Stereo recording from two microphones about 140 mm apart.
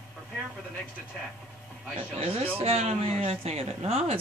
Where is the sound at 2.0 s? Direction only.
45° right (ahead or behind).